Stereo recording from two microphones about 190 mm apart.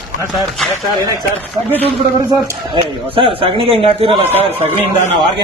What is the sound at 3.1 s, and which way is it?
A man's voice, 30° right (ahead or behind).